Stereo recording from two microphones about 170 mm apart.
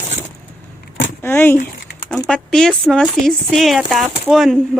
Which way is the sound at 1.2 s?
10° left (ahead or behind).